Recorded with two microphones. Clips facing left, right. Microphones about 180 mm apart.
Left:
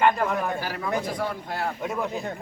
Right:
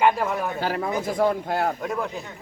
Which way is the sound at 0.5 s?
55° right (ahead or behind).